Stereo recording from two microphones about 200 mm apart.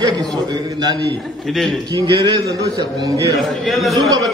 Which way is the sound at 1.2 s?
Centre (ahead or behind).